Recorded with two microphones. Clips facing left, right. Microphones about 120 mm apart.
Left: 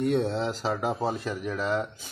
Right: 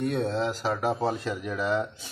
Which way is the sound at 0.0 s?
25° left (ahead or behind).